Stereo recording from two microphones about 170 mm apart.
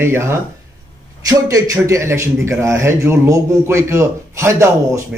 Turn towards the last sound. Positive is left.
turn(degrees=-15)  # may be behind; listen again after turning